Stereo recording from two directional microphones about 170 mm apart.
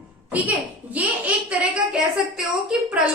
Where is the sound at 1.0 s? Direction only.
5° right (ahead or behind).